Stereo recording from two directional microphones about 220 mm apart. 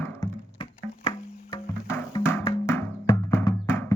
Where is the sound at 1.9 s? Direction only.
10° left (ahead or behind).